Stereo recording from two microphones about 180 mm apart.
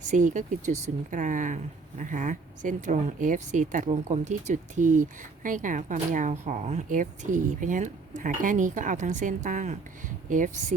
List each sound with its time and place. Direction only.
0.1 s speech: 45° right (ahead or behind)